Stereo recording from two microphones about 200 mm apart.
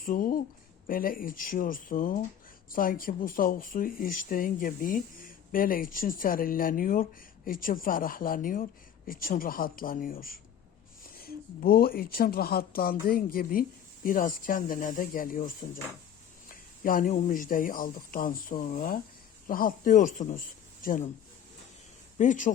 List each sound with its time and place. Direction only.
0.0 s speech: 45° left (ahead or behind)
22.2 s a man's voice: 40° left (ahead or behind)